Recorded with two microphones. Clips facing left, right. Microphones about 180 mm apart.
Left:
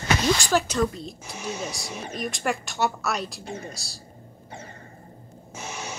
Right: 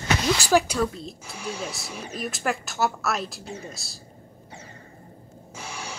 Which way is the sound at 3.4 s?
55° left (ahead or behind).